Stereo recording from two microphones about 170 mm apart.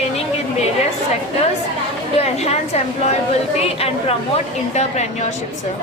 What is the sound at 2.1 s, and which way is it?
A woman's voice, 40° left (ahead or behind).